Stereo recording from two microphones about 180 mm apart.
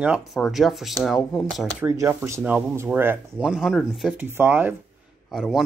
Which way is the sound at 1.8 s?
15° right (ahead or behind).